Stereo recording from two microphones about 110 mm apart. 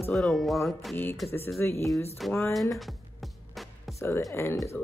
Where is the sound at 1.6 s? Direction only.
25° left (ahead or behind).